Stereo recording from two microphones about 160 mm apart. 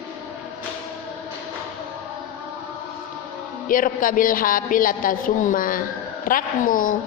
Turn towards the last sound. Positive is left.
turn(degrees=55)  # may be behind; listen again after turning